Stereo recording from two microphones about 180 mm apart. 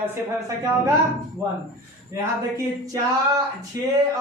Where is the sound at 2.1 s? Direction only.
15° right (ahead or behind).